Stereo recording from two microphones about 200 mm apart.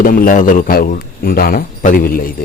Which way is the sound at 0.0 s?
45° left (ahead or behind).